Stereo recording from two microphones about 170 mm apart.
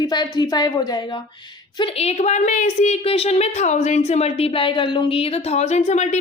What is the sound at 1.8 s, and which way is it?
A woman's voice, 40° left (ahead or behind).